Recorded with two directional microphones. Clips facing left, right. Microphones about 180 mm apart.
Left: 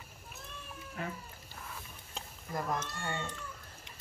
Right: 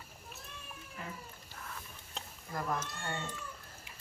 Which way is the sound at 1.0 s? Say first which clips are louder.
Left 6 dB; 65° left (ahead or behind).